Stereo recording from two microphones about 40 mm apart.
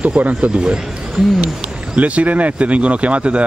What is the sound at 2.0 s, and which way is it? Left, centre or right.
Speech, right.